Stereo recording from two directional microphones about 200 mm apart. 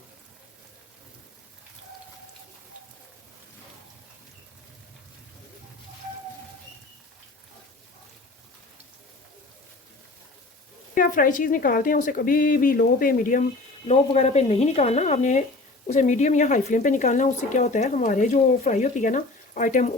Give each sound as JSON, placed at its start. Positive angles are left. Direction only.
{"t": 10.9, "sound": "a woman's voice", "side_deg": 45}
{"t": 13.8, "sound": "speech", "side_deg": 30}